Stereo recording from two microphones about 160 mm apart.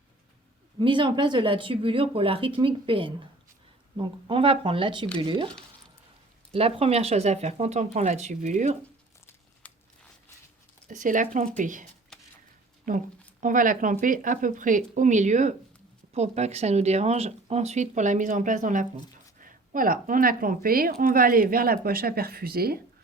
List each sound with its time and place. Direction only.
0.8 s speech: 30° right (ahead or behind); by 8.8 s 50° right (ahead or behind)
10.8 s speech: 55° right (ahead or behind)
12.9 s speech: 55° right (ahead or behind)